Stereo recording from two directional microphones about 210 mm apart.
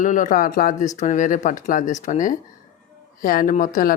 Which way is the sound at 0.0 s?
35° left (ahead or behind).